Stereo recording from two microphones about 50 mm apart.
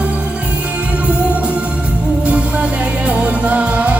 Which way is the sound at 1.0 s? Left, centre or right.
Right.